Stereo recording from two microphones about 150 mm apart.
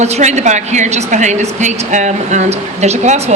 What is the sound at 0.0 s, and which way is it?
A woman's voice, 50° right (ahead or behind).